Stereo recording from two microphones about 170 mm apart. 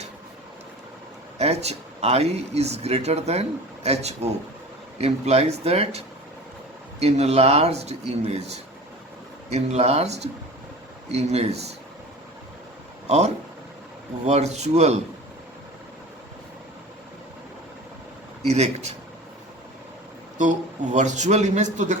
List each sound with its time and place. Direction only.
1.4 s speech: 40° right (ahead or behind)
13.1 s speech: 40° right (ahead or behind)
18.4 s speech: 40° right (ahead or behind)
20.4 s a man's voice: 45° right (ahead or behind)